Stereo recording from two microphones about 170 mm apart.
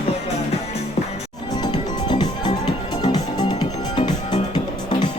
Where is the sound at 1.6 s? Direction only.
25° left (ahead or behind).